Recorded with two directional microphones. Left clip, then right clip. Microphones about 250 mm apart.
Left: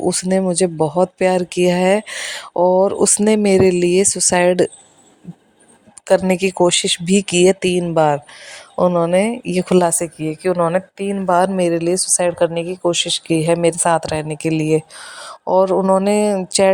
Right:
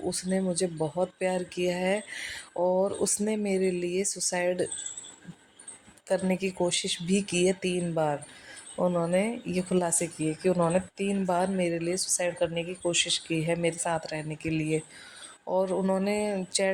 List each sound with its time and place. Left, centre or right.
0.0 s speech: left
6.1 s speech: left